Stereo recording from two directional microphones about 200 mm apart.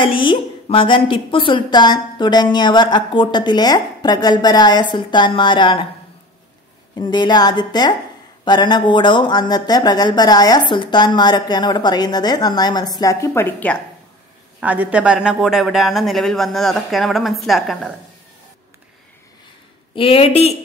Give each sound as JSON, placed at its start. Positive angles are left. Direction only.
{"t": 0.0, "sound": "a woman's voice", "side_deg": 25}
{"t": 7.0, "sound": "a woman's voice", "side_deg": 20}
{"t": 14.6, "sound": "speech", "side_deg": -10}
{"t": 20.0, "sound": "a woman's voice", "side_deg": 30}